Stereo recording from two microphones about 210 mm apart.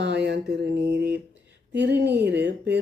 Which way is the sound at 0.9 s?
50° right (ahead or behind).